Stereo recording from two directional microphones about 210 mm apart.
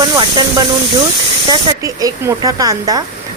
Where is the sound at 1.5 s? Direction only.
20° right (ahead or behind).